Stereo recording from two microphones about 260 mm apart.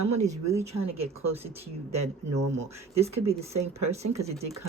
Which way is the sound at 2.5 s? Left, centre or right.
Right.